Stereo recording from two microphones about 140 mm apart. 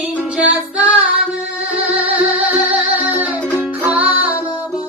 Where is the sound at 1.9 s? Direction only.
45° right (ahead or behind).